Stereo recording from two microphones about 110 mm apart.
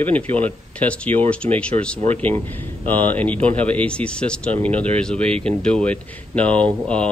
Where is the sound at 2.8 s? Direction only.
15° left (ahead or behind).